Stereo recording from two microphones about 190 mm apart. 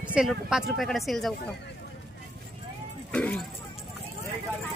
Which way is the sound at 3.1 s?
5° left (ahead or behind).